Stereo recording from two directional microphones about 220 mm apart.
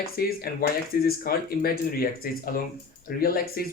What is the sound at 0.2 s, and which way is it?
Speech, 45° left (ahead or behind).